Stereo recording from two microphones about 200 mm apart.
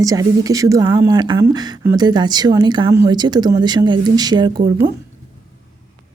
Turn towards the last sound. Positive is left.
turn(degrees=-20)  # may be behind; listen again after turning